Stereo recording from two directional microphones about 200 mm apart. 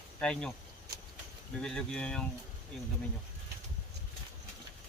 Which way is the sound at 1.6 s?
5° left (ahead or behind).